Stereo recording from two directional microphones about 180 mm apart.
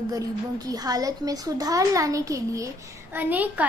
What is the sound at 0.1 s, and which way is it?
Speech, 20° right (ahead or behind).